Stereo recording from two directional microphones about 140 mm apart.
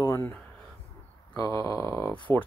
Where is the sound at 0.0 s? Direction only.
20° left (ahead or behind).